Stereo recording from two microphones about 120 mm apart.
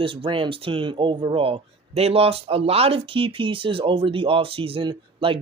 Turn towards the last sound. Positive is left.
turn(degrees=-50)  # may be behind; listen again after turning